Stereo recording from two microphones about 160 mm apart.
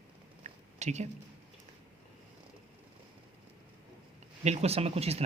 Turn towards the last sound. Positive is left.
turn(degrees=-40)  # may be behind; listen again after turning